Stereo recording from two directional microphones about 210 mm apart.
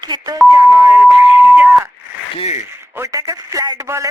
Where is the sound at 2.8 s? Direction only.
15° right (ahead or behind).